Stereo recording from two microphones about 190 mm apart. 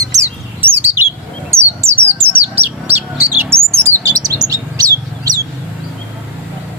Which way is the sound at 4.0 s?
15° right (ahead or behind).